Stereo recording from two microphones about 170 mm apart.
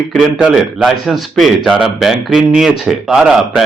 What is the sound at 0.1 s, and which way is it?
A man's voice, 5° right (ahead or behind).